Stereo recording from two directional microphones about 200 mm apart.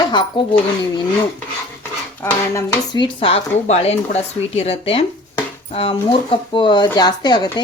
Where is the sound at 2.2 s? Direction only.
15° left (ahead or behind).